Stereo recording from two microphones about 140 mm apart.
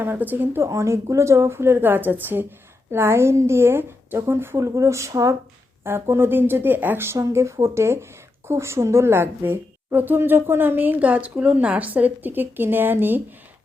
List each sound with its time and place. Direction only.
0.0 s a woman's voice: 15° right (ahead or behind)